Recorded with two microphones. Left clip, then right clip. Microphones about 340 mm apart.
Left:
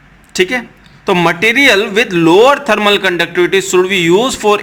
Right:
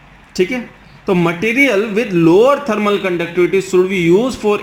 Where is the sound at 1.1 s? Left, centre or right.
Left.